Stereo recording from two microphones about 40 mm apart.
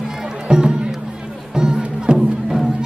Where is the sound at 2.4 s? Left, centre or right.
Centre.